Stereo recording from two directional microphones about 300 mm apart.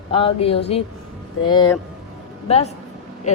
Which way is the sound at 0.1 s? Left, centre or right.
Centre.